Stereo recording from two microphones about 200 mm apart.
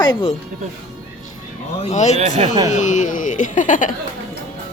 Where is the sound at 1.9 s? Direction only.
35° left (ahead or behind).